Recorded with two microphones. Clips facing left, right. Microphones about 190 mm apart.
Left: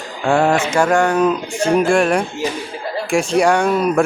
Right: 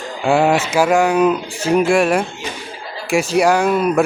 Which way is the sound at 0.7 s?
5° right (ahead or behind).